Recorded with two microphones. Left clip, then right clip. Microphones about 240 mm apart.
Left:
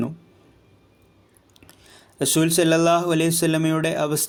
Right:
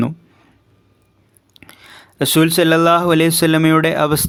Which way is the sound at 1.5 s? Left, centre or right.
Right.